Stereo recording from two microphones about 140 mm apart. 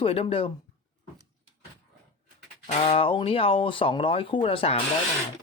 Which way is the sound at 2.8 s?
40° left (ahead or behind).